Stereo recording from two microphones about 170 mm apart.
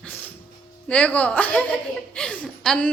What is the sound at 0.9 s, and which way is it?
A woman's voice, 5° left (ahead or behind).